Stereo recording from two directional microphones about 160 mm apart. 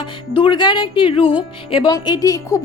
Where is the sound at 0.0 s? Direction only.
30° left (ahead or behind).